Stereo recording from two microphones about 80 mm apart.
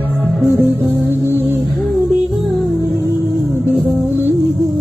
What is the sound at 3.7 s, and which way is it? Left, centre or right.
Music, right.